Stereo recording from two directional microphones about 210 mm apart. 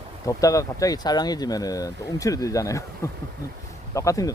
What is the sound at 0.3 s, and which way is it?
Speech, 15° left (ahead or behind).